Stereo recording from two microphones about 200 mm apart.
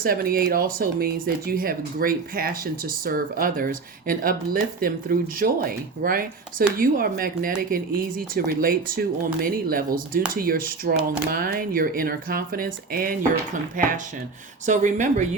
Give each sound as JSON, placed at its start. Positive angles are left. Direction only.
{"t": 0.0, "sound": "speech", "side_deg": -45}
{"t": 14.7, "sound": "speech", "side_deg": -40}